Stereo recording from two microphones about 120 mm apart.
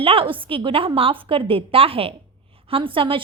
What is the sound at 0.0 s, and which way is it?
A woman's voice, 50° right (ahead or behind).